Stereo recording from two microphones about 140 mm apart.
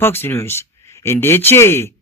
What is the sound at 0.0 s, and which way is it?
Speech, 15° left (ahead or behind).